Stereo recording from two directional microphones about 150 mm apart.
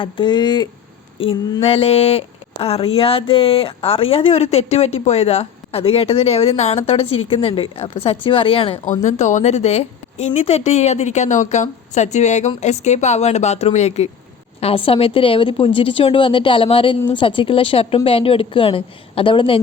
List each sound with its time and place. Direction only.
0.0 s speech: 30° left (ahead or behind)
1.6 s speech: 40° left (ahead or behind)
8.8 s a woman's voice: 55° left (ahead or behind); by 19.5 s 35° left (ahead or behind)